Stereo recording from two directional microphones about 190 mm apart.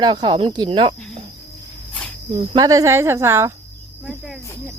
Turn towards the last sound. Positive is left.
turn(degrees=-5)  # may be behind; listen again after turning